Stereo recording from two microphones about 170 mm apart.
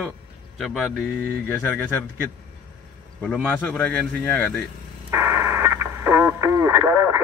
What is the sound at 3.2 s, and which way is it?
Speech, 10° left (ahead or behind).